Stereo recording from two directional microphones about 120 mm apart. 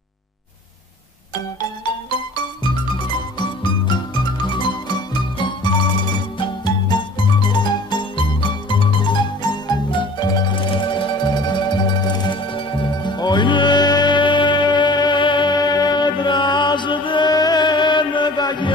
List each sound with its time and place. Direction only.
2.0 s music: 40° left (ahead or behind)
7.4 s music: 40° left (ahead or behind)